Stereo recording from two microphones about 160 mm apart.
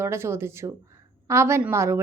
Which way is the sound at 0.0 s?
15° right (ahead or behind).